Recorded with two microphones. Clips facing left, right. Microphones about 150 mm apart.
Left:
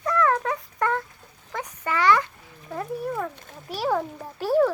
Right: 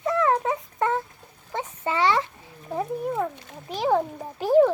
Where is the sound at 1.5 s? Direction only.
25° right (ahead or behind).